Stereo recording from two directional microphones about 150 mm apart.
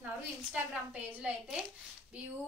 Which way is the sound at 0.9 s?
10° right (ahead or behind).